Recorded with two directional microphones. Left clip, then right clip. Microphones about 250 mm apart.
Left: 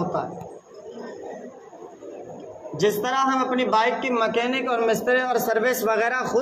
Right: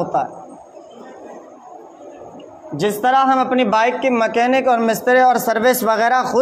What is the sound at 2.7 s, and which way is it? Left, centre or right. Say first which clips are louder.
A man's voice: right 7 dB; right.